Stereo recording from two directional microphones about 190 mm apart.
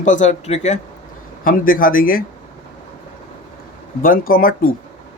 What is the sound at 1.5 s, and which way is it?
Speech, 45° left (ahead or behind).